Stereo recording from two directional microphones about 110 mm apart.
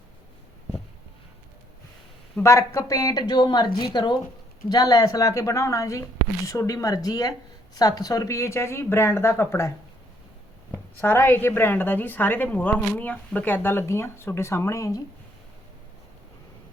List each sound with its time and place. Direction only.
2.4 s a woman's voice: 25° left (ahead or behind)